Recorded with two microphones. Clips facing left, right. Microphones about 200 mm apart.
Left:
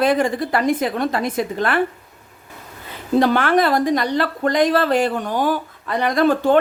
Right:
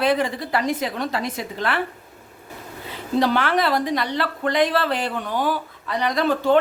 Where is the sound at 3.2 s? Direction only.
50° left (ahead or behind).